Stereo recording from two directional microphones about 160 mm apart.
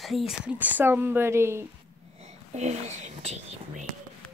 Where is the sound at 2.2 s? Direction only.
45° right (ahead or behind).